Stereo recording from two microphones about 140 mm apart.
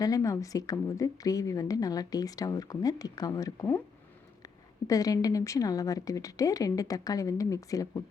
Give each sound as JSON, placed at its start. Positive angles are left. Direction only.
{"t": 0.0, "sound": "a woman's voice", "side_deg": 25}